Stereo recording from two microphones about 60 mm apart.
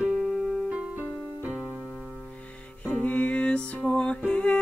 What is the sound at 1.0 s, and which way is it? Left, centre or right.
Keyboard, right.